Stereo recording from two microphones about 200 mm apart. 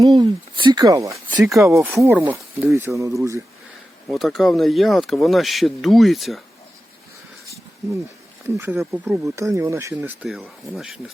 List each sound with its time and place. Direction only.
0.0 s speech: 20° right (ahead or behind)
4.1 s speech: centre (ahead or behind)
8.4 s speech: 10° right (ahead or behind)